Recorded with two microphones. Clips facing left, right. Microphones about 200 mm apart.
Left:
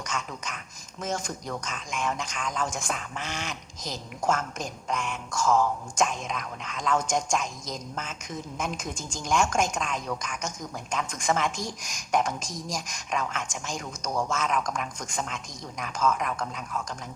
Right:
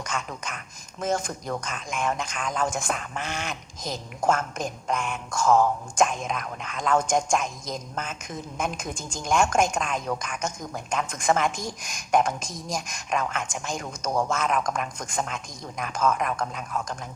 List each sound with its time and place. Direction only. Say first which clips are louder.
0.0 s speech: right 2 dB; 55° right (ahead or behind)